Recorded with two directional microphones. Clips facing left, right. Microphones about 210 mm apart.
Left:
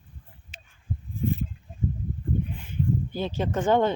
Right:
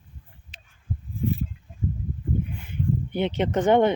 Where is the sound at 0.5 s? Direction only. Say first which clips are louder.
Right 1 dB; 5° left (ahead or behind).